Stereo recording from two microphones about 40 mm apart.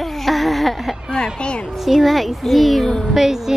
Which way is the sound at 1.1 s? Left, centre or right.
Left.